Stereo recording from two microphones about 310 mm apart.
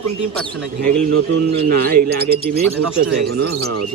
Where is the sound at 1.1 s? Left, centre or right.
Right.